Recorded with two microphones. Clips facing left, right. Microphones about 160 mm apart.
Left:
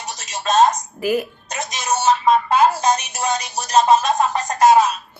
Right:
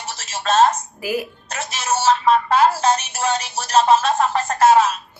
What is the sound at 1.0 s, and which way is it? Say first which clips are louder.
Mantra: left 4 dB; 5° right (ahead or behind).